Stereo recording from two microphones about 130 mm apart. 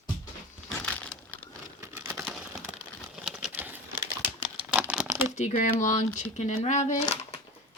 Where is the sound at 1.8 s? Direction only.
20° right (ahead or behind).